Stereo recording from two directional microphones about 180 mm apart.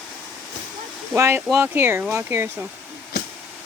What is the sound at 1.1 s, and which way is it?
Speech, 15° right (ahead or behind).